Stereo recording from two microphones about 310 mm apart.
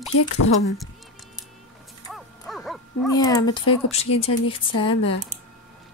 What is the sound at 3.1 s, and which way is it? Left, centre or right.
A woman's voice, centre.